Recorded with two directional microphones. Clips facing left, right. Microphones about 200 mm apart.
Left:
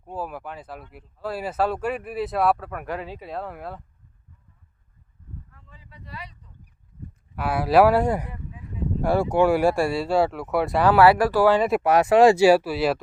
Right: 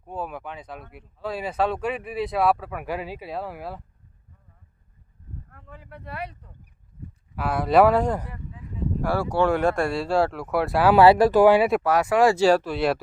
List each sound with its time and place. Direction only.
0.0 s speech: 5° left (ahead or behind)
5.5 s a sound: 60° right (ahead or behind)
7.3 s speech: 5° left (ahead or behind)
10.9 s speech: 25° right (ahead or behind)
11.8 s speech: 25° left (ahead or behind)
12.4 s speech: 10° left (ahead or behind)